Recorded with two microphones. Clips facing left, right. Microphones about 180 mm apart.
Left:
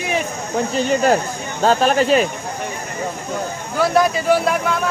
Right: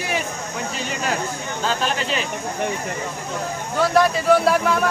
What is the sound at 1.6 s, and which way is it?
Speech, 45° left (ahead or behind).